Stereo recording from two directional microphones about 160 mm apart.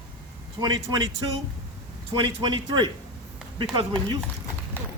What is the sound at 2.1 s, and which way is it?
A man's voice, 30° right (ahead or behind).